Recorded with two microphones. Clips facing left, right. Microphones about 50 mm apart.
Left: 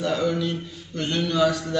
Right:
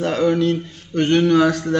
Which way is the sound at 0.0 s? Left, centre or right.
Right.